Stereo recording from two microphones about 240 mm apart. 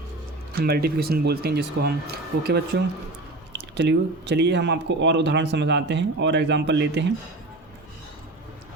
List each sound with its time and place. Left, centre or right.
0.5 s speech: right